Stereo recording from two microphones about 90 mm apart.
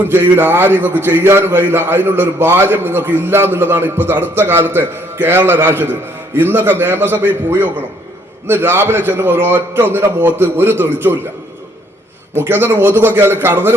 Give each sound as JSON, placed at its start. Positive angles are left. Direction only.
{"t": 0.0, "sound": "a man's voice", "side_deg": -25}
{"t": 12.4, "sound": "a man's voice", "side_deg": -25}